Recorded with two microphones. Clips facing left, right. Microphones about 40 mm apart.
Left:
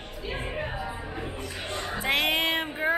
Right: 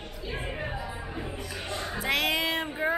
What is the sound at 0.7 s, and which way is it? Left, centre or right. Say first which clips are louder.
Music: left 2 dB; left.